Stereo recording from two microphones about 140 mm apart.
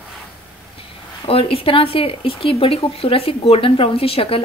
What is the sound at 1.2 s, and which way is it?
Speech, 40° left (ahead or behind).